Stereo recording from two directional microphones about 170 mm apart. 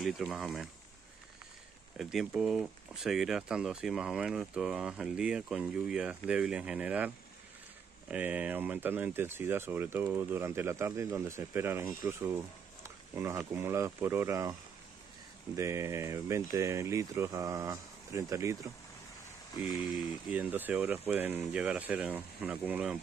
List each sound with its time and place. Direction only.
0.0 s speech: centre (ahead or behind)
2.0 s speech: 5° right (ahead or behind)
8.1 s speech: 10° right (ahead or behind)
20.2 s speech: 10° right (ahead or behind)